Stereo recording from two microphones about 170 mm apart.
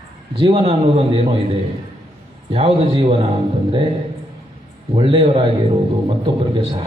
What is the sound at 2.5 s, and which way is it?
Speech, 35° right (ahead or behind).